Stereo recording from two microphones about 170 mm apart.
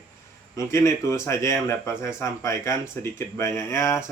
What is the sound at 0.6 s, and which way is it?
Speech, 15° left (ahead or behind).